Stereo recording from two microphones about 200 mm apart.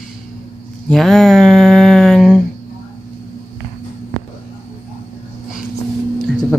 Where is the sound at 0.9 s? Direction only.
Centre (ahead or behind).